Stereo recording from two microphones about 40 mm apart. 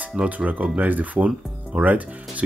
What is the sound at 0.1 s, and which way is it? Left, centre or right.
Speech, right.